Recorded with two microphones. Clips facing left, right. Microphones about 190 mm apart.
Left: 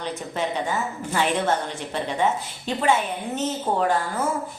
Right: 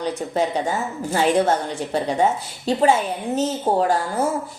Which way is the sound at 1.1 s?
35° right (ahead or behind).